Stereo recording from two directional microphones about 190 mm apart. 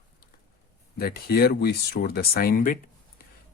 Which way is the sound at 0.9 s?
55° left (ahead or behind).